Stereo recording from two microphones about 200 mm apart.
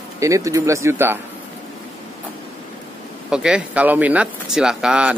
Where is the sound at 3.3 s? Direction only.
5° right (ahead or behind).